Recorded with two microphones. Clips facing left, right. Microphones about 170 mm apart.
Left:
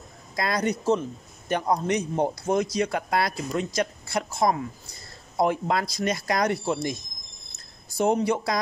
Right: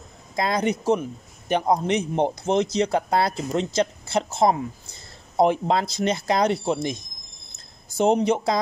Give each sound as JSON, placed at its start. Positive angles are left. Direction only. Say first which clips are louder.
{"t": 0.4, "sound": "speech", "louder": "right 3 dB", "side_deg": -20}
{"t": 8.0, "sound": "speech", "louder": "right 3 dB", "side_deg": -20}